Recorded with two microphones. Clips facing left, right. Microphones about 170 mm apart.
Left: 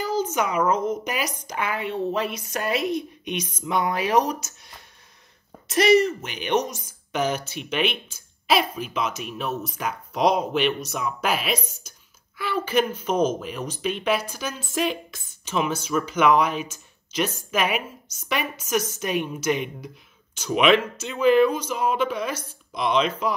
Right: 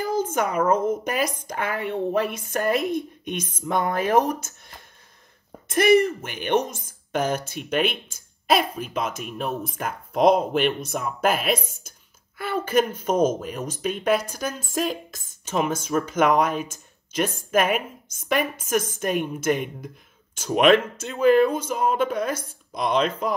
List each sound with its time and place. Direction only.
0.0 s a woman's voice: 50° right (ahead or behind)
3.0 s a woman's voice: 15° left (ahead or behind)
3.5 s a woman's voice: 50° right (ahead or behind)
5.7 s a woman's voice: 55° right (ahead or behind)